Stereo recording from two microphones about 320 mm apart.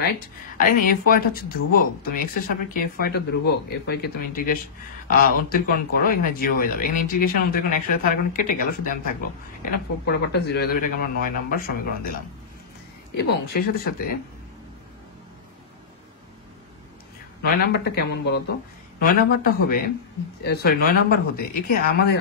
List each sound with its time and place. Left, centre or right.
0.6 s speech: left
13.5 s speech: left
17.4 s speech: left